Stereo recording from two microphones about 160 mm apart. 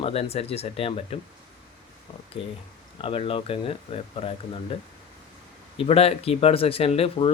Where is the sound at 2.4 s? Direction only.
35° left (ahead or behind).